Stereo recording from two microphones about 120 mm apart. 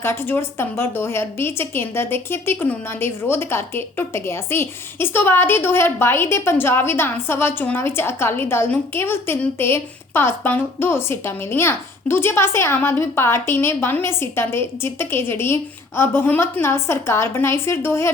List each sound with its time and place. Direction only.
0.0 s a woman's voice: 20° left (ahead or behind)